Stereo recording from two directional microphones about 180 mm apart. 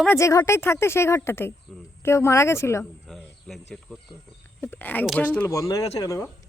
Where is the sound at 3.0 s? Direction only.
Centre (ahead or behind).